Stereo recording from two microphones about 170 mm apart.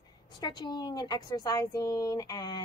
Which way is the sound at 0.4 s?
25° left (ahead or behind).